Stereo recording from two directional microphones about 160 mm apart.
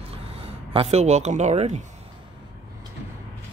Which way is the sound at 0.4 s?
40° right (ahead or behind).